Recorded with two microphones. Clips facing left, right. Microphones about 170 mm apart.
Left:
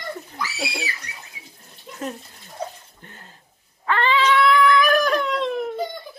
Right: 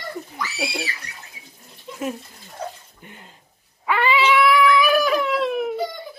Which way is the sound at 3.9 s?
10° right (ahead or behind).